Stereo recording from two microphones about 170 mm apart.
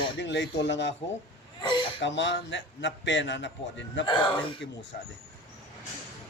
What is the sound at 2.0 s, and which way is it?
A man's voice, 90° left.